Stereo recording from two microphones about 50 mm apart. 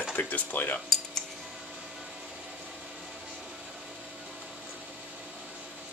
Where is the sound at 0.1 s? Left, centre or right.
Left.